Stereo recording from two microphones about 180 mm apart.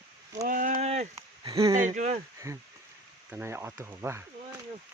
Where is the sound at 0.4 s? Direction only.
50° right (ahead or behind).